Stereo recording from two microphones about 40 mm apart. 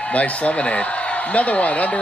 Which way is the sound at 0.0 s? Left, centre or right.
Left.